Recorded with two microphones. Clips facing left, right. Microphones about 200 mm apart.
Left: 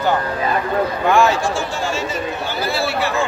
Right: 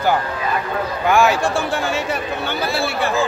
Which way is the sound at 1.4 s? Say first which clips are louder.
Right 1 dB; 60° right (ahead or behind).